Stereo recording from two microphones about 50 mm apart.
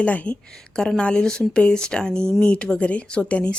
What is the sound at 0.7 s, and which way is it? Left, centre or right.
Speech, centre.